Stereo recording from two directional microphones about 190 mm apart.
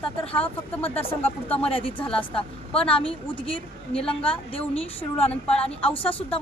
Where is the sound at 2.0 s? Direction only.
5° left (ahead or behind).